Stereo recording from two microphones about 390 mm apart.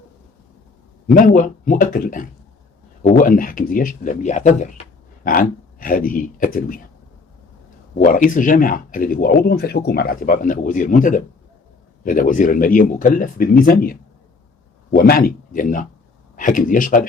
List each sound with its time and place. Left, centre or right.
1.0 s speech: left
7.9 s speech: left